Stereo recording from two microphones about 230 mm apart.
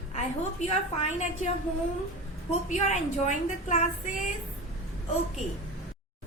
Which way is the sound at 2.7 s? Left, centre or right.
Left.